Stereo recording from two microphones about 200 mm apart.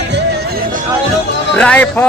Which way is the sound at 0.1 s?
55° right (ahead or behind).